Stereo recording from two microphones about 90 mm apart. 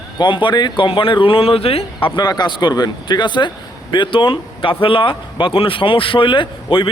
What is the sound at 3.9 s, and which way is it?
Speech, 70° left (ahead or behind).